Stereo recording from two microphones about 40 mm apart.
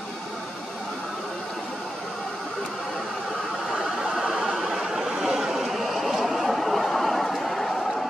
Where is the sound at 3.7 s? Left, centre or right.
Centre.